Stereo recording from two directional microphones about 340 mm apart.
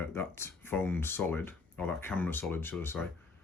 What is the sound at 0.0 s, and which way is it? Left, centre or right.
Speech, centre.